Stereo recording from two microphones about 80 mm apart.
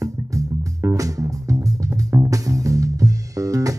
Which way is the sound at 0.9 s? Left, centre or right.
Right.